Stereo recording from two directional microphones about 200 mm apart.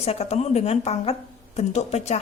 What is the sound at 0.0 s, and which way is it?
Speech, 30° left (ahead or behind).